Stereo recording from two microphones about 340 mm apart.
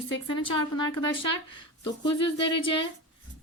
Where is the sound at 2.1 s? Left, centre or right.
Left.